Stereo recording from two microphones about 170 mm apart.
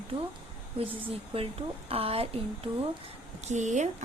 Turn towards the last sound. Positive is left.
turn(degrees=-45)  # may be behind; listen again after turning